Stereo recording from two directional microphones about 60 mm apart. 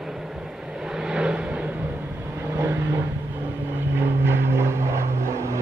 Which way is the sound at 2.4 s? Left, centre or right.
Right.